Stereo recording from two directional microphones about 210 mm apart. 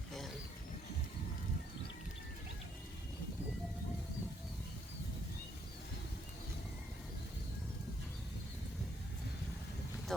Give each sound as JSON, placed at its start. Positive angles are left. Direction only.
{"t": 10.1, "sound": "speech", "side_deg": 0}